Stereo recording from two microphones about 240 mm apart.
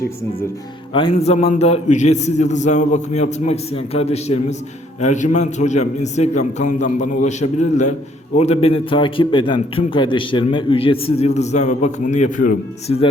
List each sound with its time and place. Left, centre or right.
0.9 s a man's voice: left